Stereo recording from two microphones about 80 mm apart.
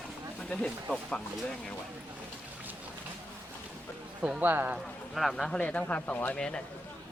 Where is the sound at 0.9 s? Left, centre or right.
Centre.